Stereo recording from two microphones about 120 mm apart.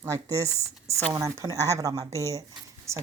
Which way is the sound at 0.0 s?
25° right (ahead or behind).